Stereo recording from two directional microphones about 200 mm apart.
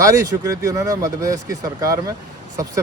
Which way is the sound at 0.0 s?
15° right (ahead or behind).